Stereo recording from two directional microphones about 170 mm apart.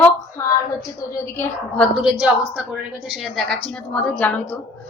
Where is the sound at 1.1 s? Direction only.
10° left (ahead or behind).